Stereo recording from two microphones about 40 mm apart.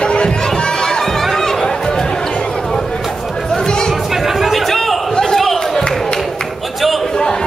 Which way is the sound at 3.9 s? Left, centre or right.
Centre.